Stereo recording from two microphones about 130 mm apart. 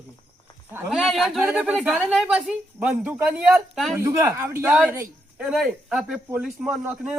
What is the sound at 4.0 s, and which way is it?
Speech, 20° right (ahead or behind).